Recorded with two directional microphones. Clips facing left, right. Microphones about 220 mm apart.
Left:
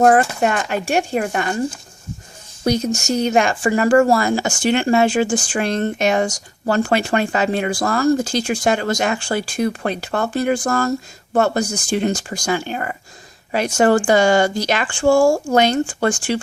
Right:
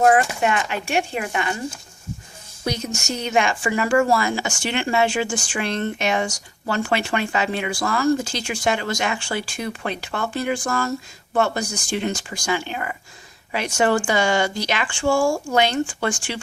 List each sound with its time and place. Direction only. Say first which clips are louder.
0.0 s speech: left 3 dB; 40° left (ahead or behind)
2.6 s speech: left 8 dB; 40° left (ahead or behind)